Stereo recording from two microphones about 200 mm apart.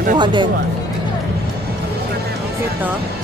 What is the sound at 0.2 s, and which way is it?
Speech, 25° right (ahead or behind).